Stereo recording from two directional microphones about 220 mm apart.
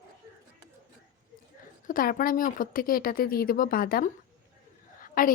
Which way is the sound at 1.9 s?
40° left (ahead or behind).